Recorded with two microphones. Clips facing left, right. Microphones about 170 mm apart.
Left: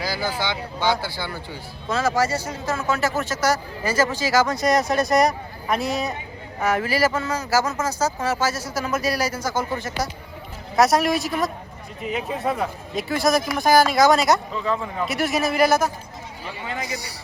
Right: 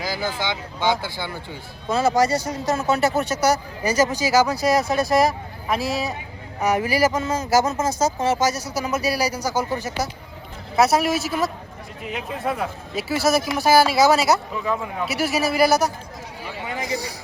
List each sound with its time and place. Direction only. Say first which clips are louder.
0.0 s vehicle: even; 20° right (ahead or behind)
0.4 s speech: right 1 dB; 20° right (ahead or behind)
2.0 s speech: right 3 dB; 35° right (ahead or behind)
3.2 s speech: right 2 dB; 15° right (ahead or behind)
6.6 s speech: right 1 dB; 15° right (ahead or behind)
10.8 s speech: even; centre (ahead or behind)